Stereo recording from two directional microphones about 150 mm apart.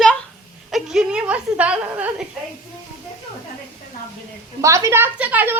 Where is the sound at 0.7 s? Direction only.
5° right (ahead or behind).